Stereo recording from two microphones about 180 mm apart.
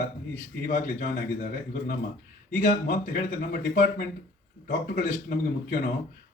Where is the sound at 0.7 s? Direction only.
50° left (ahead or behind).